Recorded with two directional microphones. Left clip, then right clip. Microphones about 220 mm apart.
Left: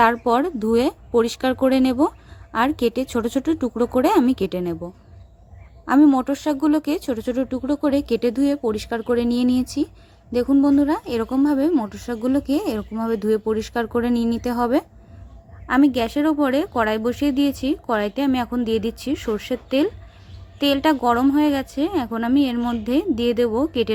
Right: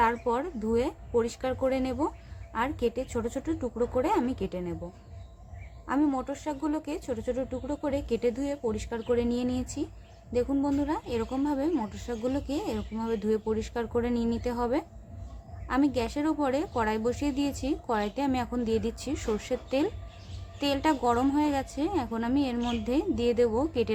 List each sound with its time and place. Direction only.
0.0 s speech: 45° left (ahead or behind)
5.8 s a woman's voice: 40° left (ahead or behind)